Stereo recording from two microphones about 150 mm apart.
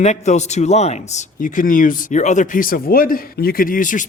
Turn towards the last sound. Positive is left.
turn(degrees=60)  # may be behind; listen again after turning